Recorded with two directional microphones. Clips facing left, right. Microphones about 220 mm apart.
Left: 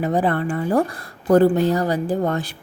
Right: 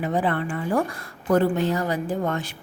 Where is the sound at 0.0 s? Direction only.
40° left (ahead or behind).